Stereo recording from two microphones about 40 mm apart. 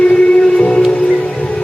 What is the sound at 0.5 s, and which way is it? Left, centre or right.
Music, left.